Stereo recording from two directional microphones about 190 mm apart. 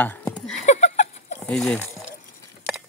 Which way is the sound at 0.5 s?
40° left (ahead or behind).